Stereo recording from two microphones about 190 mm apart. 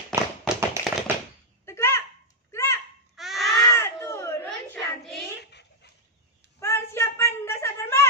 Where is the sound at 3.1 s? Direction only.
Centre (ahead or behind).